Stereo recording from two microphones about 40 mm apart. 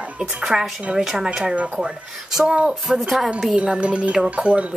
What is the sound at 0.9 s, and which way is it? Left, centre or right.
Speech, right.